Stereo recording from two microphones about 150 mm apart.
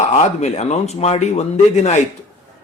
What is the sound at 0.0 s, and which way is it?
Speech, 50° left (ahead or behind).